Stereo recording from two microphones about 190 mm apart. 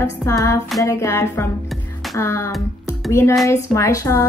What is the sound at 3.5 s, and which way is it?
Speech, 15° left (ahead or behind).